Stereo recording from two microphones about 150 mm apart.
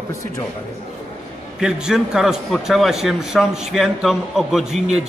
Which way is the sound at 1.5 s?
5° right (ahead or behind).